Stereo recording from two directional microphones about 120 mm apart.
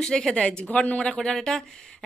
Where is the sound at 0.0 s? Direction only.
5° left (ahead or behind).